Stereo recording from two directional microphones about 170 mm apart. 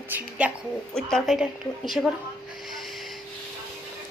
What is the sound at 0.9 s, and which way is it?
A woman's voice, centre (ahead or behind).